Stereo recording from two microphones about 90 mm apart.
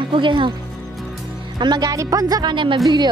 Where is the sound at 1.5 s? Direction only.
50° right (ahead or behind).